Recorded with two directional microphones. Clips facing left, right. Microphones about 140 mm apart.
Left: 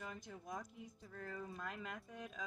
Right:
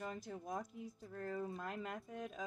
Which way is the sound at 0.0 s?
35° right (ahead or behind).